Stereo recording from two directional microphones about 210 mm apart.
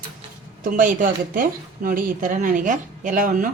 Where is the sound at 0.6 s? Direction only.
40° right (ahead or behind).